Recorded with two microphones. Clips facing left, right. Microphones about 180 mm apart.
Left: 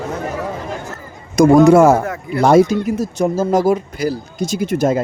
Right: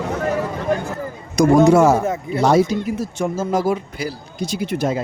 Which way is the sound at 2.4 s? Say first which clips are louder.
Left 4 dB; 50° left (ahead or behind).